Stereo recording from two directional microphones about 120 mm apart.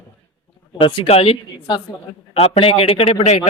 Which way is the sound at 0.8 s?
50° left (ahead or behind).